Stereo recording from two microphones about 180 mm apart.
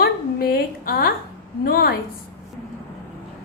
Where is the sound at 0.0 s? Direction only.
55° left (ahead or behind).